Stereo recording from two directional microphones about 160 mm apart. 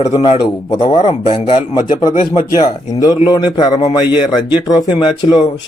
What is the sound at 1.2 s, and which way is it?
Speech, 50° left (ahead or behind).